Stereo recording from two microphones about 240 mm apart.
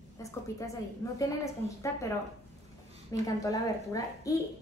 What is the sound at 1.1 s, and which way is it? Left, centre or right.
Speech, centre.